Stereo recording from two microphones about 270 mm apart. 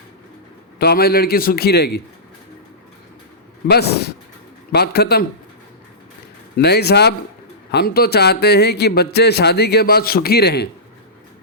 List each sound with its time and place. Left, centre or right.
0.8 s a man's voice: left
3.7 s a man's voice: left
6.6 s a man's voice: left